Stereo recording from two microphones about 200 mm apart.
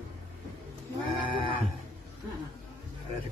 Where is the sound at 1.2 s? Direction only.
25° right (ahead or behind).